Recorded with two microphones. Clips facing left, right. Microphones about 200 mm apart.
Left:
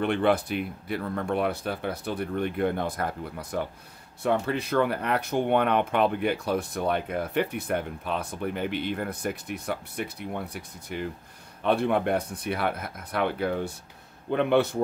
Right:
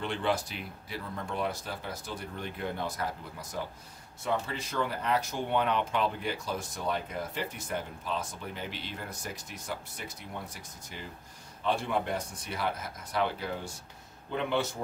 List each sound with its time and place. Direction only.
0.0 s speech: 60° left (ahead or behind)